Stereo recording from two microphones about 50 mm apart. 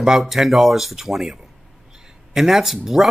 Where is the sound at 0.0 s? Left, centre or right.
Centre.